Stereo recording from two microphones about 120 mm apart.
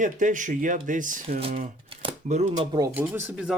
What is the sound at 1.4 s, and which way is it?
Speech, 55° right (ahead or behind).